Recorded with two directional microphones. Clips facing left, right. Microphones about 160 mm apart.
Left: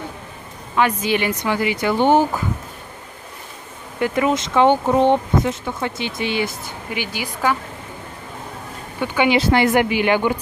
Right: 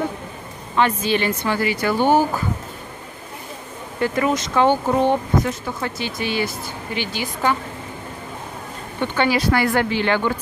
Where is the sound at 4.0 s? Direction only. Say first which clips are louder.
Left 1 dB; 15° left (ahead or behind).